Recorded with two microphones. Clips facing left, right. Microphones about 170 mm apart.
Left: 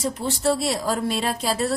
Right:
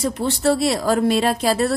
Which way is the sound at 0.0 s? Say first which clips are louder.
Right 4 dB; 75° right (ahead or behind).